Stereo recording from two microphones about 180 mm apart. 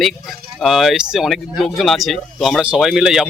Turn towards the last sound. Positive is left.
turn(degrees=-5)  # may be behind; listen again after turning